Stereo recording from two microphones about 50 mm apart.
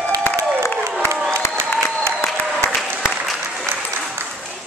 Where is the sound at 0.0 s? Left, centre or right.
Left.